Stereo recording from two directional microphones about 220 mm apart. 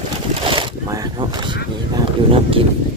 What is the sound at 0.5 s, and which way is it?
Speech, 20° right (ahead or behind).